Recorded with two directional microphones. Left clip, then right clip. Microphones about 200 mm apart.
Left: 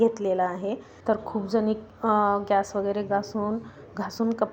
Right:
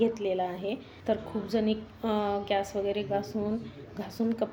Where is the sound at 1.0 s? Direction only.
20° left (ahead or behind).